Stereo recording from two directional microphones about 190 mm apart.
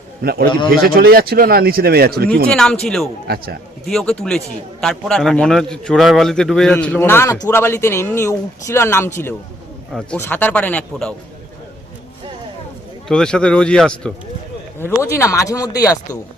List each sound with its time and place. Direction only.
0.2 s speech: 55° right (ahead or behind)
2.5 s a man's voice: 5° left (ahead or behind)
3.2 s speech: 55° right (ahead or behind)
3.8 s a man's voice: 5° left (ahead or behind)
13.1 s a man's voice: 5° left (ahead or behind)
15.1 s speech: 15° left (ahead or behind)